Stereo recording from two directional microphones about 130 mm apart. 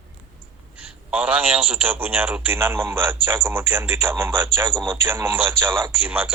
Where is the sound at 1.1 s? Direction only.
10° right (ahead or behind).